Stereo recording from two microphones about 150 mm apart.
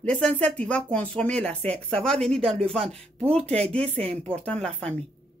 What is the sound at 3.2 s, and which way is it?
Speech, 40° right (ahead or behind).